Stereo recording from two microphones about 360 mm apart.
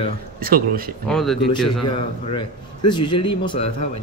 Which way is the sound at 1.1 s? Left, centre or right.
Centre.